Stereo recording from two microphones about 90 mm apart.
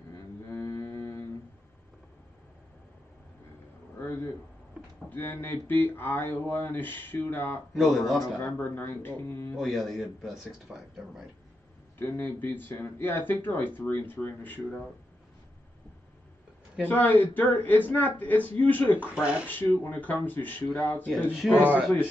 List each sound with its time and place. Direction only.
0.5 s a sound: 30° left (ahead or behind)
4.0 s a man's voice: 25° left (ahead or behind)
7.7 s speech: centre (ahead or behind)
8.4 s speech: 25° left (ahead or behind)
9.6 s speech: centre (ahead or behind)
12.0 s speech: 20° left (ahead or behind)
16.8 s speech: 20° left (ahead or behind)
19.0 s speech: 15° right (ahead or behind)
19.4 s speech: 20° left (ahead or behind)
21.5 s speech: 15° right (ahead or behind)